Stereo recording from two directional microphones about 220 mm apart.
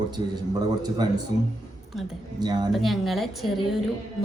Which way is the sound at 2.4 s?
20° right (ahead or behind).